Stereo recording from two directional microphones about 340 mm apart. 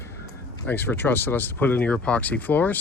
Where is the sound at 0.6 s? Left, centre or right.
Centre.